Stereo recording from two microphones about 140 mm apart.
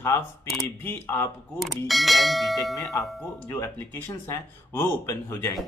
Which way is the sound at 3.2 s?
15° left (ahead or behind).